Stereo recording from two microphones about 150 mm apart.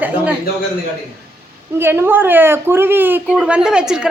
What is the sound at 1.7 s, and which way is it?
A woman's voice, 15° right (ahead or behind).